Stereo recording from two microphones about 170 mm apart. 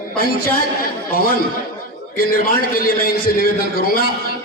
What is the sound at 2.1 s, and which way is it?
Speech, 60° left (ahead or behind).